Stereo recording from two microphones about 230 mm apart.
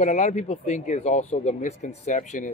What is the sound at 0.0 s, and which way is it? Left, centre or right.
A man's voice, left.